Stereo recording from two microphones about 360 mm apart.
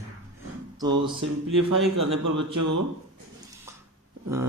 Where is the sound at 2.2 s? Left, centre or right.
Right.